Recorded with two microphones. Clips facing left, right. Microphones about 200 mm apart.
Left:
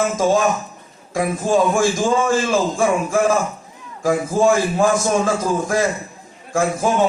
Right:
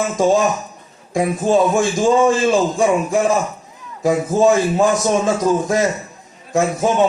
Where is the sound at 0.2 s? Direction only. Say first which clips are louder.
Right 5 dB; 15° right (ahead or behind).